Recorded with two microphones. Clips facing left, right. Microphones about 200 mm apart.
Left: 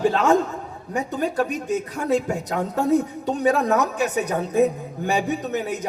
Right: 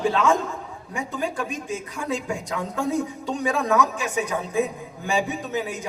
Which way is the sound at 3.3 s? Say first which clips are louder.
Left 4 dB; 40° left (ahead or behind).